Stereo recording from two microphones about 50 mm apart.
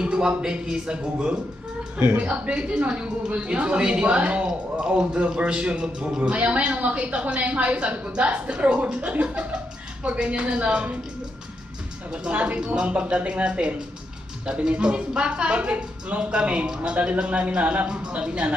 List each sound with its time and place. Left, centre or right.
0.0 s a woman's voice: centre
12.1 s a woman's voice: right